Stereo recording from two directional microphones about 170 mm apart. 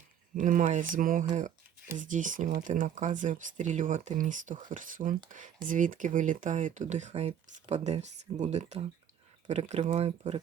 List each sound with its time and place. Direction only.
0.3 s speech: 50° right (ahead or behind)